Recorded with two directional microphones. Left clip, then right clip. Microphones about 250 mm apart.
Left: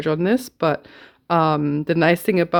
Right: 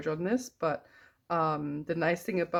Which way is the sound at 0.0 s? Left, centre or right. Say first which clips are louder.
Left 11 dB; left.